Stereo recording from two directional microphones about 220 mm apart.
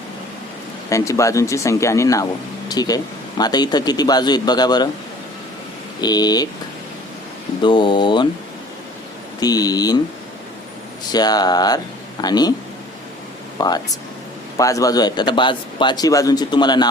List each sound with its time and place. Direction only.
0.9 s a man's voice: 15° left (ahead or behind)
6.0 s speech: 20° left (ahead or behind)
7.6 s a man's voice: 20° left (ahead or behind)
9.4 s speech: 15° left (ahead or behind)
11.1 s speech: 20° left (ahead or behind)
13.6 s a man's voice: 20° left (ahead or behind)